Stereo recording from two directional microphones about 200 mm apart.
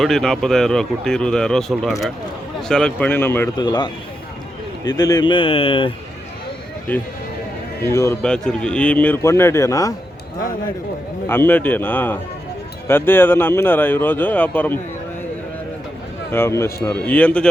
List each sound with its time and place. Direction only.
0.0 s a man's voice: centre (ahead or behind)
3.6 s speech: 20° left (ahead or behind)
7.9 s a man's voice: 15° left (ahead or behind)
11.3 s a man's voice: 10° left (ahead or behind)
16.3 s a man's voice: 15° left (ahead or behind)